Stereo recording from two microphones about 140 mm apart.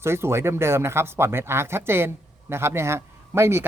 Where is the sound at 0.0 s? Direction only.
20° right (ahead or behind).